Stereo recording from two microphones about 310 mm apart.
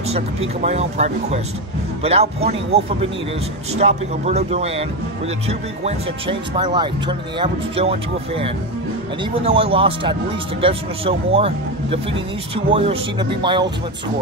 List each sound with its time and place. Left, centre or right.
0.1 s speech: right